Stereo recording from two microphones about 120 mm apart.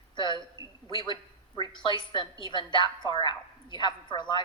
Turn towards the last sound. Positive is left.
turn(degrees=40)  # may be behind; listen again after turning